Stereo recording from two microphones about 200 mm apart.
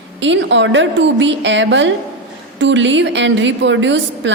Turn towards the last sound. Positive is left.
turn(degrees=-65)  # may be behind; listen again after turning